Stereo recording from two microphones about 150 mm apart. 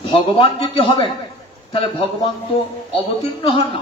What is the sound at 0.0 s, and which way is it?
Speech, 40° left (ahead or behind).